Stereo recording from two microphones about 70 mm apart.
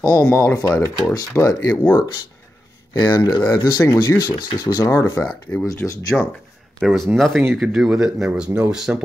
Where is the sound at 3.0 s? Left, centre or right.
Left.